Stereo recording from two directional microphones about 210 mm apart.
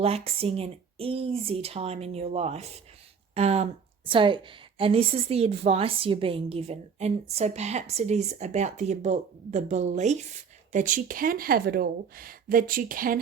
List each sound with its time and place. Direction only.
0.0 s a woman's voice: 30° right (ahead or behind)